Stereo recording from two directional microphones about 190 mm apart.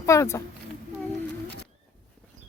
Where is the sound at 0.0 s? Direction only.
15° left (ahead or behind).